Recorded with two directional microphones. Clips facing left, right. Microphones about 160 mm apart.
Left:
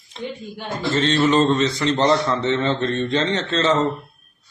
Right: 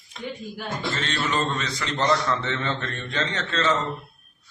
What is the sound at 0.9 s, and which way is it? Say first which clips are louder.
A man's voice: left 12 dB; 25° left (ahead or behind).